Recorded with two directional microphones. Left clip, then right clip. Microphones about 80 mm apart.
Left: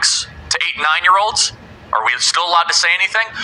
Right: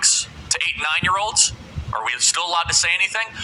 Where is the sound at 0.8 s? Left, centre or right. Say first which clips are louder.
Left 10 dB; left.